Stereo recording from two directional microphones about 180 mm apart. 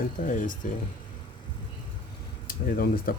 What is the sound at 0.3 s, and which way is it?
Speech, 45° left (ahead or behind).